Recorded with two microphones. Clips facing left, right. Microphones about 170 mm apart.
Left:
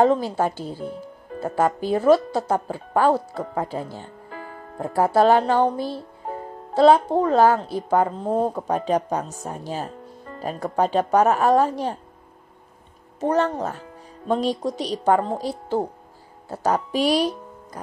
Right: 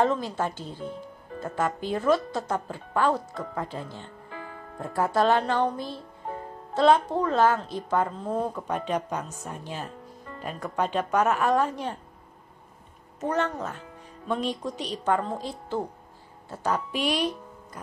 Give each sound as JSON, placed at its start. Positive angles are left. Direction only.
{"t": 0.0, "sound": "speech", "side_deg": 35}
{"t": 13.2, "sound": "speech", "side_deg": 35}